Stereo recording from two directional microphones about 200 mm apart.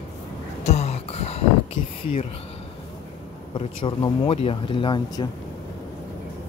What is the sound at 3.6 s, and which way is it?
Speech, 25° left (ahead or behind).